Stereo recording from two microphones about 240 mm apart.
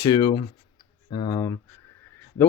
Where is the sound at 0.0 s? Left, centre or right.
Centre.